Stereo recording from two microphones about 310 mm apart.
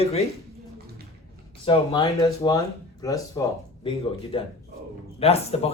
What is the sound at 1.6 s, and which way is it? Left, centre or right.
Speech, centre.